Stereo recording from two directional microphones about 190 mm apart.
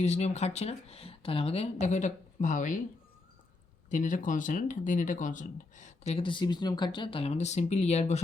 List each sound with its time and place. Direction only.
0.0 s speech: 35° left (ahead or behind)
3.8 s speech: 45° left (ahead or behind)